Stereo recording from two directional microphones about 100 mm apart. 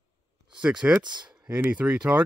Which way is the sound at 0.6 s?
10° right (ahead or behind).